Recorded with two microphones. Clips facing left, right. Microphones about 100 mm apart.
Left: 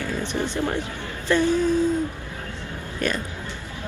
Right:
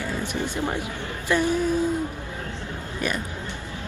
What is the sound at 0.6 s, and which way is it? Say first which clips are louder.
Speech: left 2 dB; 15° right (ahead or behind).